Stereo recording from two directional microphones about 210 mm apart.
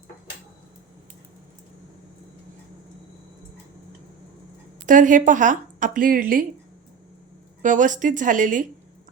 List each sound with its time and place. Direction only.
4.9 s a woman's voice: 40° right (ahead or behind)
7.6 s a woman's voice: 35° right (ahead or behind)